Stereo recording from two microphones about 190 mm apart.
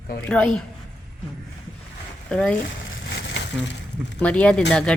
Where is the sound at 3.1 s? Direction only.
65° left (ahead or behind).